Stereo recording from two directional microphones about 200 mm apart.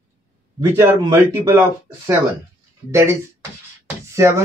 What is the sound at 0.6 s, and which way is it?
Speech, 10° right (ahead or behind).